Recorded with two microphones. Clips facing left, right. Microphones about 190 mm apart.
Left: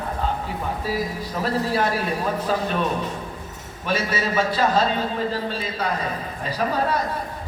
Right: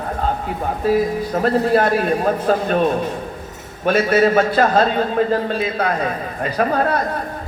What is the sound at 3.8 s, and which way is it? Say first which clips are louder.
A man's voice: right 10 dB; 55° right (ahead or behind).